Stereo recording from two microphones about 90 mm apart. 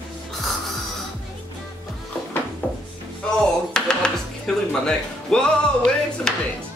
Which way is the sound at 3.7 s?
10° left (ahead or behind).